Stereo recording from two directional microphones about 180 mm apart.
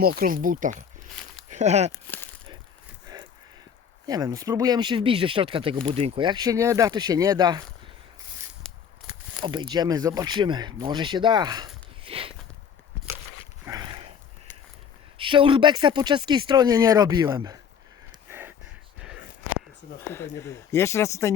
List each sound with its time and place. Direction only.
0.0 s speech: 55° right (ahead or behind); by 1.9 s 40° right (ahead or behind)
1.9 s speech: 10° left (ahead or behind)
4.0 s speech: 20° right (ahead or behind)
8.7 s a sound: 5° left (ahead or behind)
9.4 s speech: 25° right (ahead or behind)
13.7 s dog: 20° right (ahead or behind)
15.2 s speech: 30° right (ahead or behind)
18.3 s a sound: 10° right (ahead or behind)
20.0 s speech: 15° left (ahead or behind)